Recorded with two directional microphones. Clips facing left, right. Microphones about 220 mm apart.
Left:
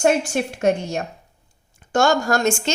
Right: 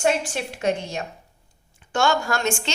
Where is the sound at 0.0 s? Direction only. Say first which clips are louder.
Left 4 dB; 45° left (ahead or behind).